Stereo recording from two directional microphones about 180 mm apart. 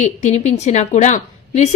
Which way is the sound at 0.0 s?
40° left (ahead or behind).